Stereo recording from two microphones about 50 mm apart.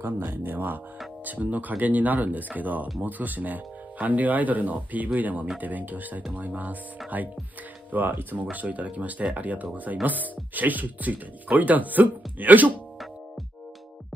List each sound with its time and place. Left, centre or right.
0.2 s speech: right
0.5 s speech: right